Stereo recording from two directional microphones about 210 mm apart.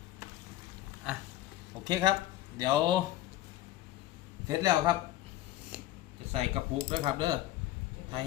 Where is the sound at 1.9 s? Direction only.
20° right (ahead or behind).